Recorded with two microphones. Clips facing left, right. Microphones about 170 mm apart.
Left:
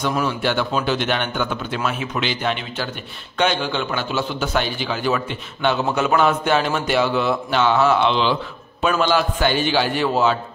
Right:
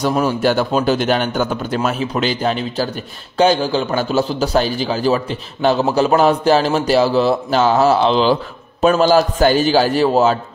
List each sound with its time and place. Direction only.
0.0 s a man's voice: 40° right (ahead or behind)